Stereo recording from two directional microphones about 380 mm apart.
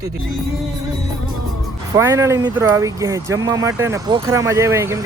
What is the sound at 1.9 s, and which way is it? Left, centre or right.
Speech, centre.